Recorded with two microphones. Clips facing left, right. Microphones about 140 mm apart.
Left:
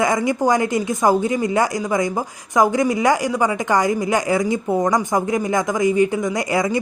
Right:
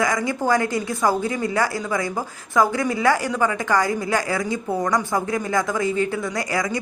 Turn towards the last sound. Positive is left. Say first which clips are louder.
# left 5 dB
turn(degrees=20)  # may be behind; listen again after turning